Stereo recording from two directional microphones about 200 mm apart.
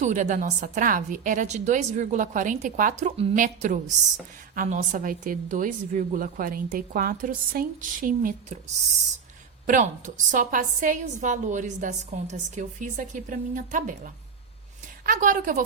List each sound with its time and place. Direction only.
0.0 s a woman's voice: 35° right (ahead or behind)
9.6 s a woman's voice: 40° right (ahead or behind)